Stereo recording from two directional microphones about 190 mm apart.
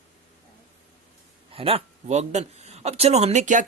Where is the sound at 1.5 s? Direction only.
30° right (ahead or behind).